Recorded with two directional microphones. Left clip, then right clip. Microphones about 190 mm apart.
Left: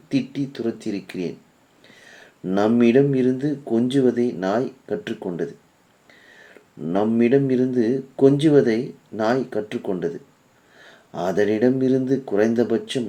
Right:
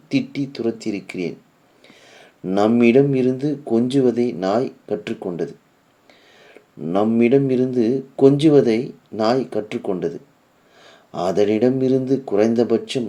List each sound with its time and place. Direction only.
0.5 s speech: 15° right (ahead or behind)
6.8 s speech: 15° right (ahead or behind)